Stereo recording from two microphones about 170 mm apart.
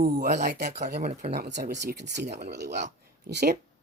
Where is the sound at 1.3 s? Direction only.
80° right.